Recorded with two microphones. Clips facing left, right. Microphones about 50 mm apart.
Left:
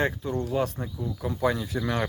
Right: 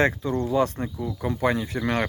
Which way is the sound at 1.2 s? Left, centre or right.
Right.